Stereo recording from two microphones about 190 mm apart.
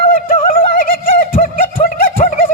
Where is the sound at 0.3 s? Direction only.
45° left (ahead or behind).